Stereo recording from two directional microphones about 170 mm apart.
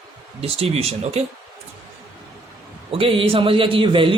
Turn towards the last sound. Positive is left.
turn(degrees=-30)  # may be behind; listen again after turning